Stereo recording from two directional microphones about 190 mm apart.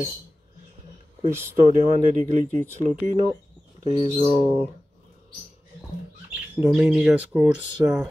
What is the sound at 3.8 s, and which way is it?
Speech, 30° right (ahead or behind).